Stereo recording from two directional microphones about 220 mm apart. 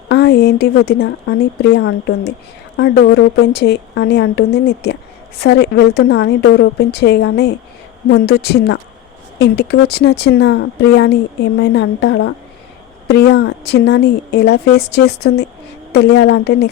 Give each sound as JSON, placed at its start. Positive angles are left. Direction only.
{"t": 0.1, "sound": "speech", "side_deg": 50}
{"t": 2.8, "sound": "speech", "side_deg": 50}